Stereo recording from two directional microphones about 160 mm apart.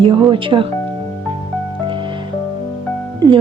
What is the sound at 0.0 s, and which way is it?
Speech, 30° right (ahead or behind).